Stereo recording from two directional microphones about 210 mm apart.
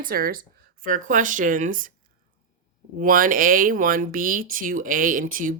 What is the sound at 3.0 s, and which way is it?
Speech, 40° right (ahead or behind).